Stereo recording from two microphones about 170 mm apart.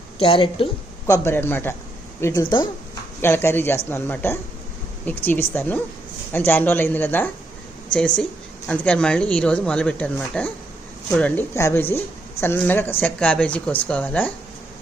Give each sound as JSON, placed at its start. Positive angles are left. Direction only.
{"t": 0.2, "sound": "a woman's voice", "side_deg": 30}
{"t": 1.0, "sound": "a woman's voice", "side_deg": 20}
{"t": 2.2, "sound": "speech", "side_deg": 25}
{"t": 3.2, "sound": "a woman's voice", "side_deg": 15}